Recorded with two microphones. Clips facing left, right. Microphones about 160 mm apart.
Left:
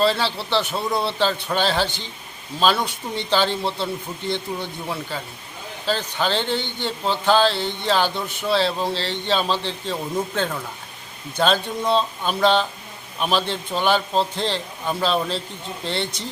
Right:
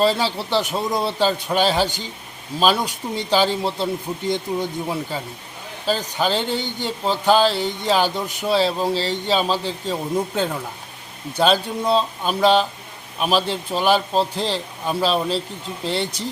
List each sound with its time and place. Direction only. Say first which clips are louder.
0.0 s a man's voice: right 1 dB; 10° right (ahead or behind)
16.1 s speech: right 4 dB; 35° right (ahead or behind)